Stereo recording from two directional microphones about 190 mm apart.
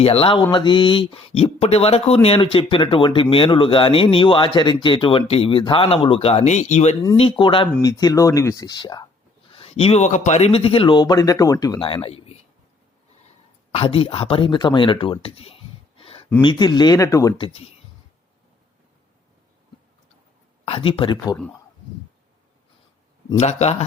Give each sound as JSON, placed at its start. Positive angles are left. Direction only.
{"t": 0.0, "sound": "speech", "side_deg": 30}
{"t": 13.7, "sound": "speech", "side_deg": 30}
{"t": 20.7, "sound": "speech", "side_deg": 30}
{"t": 23.4, "sound": "speech", "side_deg": 35}